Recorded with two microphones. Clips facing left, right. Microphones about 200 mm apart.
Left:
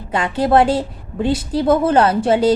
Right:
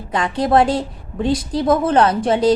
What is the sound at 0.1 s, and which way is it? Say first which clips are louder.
A woman's voice: left 1 dB; 5° left (ahead or behind).